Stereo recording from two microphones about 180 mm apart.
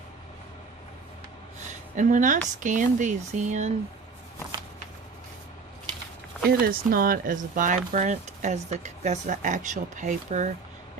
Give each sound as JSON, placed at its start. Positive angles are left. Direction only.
{"t": 2.0, "sound": "speech", "side_deg": -45}
{"t": 6.5, "sound": "speech", "side_deg": -55}